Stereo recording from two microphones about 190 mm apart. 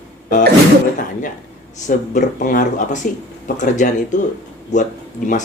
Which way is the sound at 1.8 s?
40° left (ahead or behind).